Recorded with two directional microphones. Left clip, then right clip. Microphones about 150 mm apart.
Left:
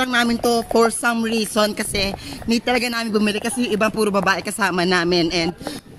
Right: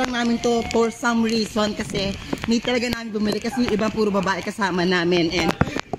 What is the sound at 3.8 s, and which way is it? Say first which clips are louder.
Speech: left 3 dB; centre (ahead or behind).